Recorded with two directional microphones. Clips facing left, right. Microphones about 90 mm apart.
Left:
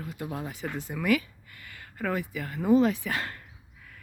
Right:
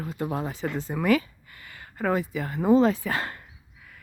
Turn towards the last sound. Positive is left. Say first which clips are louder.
# right 3 dB
turn(degrees=-30)  # may be behind; listen again after turning